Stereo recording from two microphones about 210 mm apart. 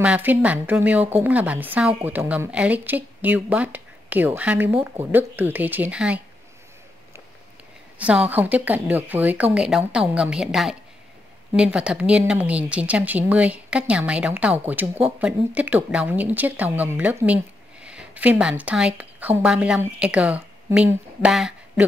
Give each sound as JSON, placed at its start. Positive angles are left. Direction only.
{"t": 0.0, "sound": "speech", "side_deg": -5}
{"t": 8.0, "sound": "speech", "side_deg": -5}